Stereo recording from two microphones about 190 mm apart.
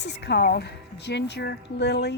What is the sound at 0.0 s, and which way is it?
Speech, 65° left (ahead or behind).